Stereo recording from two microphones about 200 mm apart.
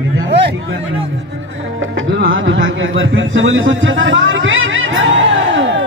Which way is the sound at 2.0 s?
70° right (ahead or behind).